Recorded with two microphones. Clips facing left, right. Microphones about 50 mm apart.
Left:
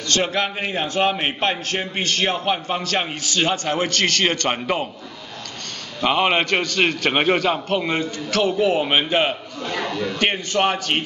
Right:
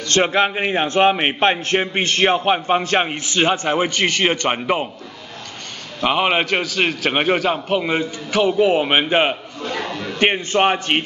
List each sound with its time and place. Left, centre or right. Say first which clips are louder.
0.1 s a man's voice: right 5 dB; right
5.9 s a man's voice: right 1 dB; centre; by 11.1 s right